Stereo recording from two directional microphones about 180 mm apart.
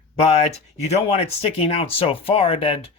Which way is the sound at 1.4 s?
35° left (ahead or behind).